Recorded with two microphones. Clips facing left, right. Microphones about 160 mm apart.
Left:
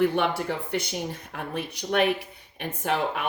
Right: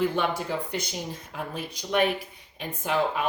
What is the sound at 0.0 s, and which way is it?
Speech, 65° left (ahead or behind).